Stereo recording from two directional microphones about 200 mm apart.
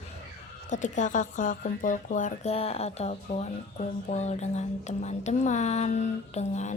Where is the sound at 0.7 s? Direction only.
40° left (ahead or behind).